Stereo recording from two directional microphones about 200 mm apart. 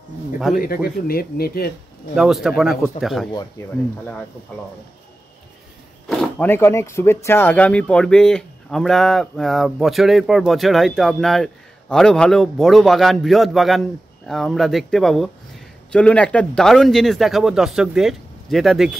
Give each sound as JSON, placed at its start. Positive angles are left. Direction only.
{"t": 0.6, "sound": "speech", "side_deg": 50}
{"t": 2.1, "sound": "speech", "side_deg": 0}
{"t": 6.0, "sound": "speech", "side_deg": 5}